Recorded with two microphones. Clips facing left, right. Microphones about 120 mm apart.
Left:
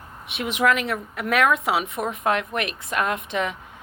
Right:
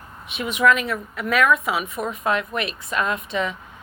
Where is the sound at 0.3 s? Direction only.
65° left (ahead or behind).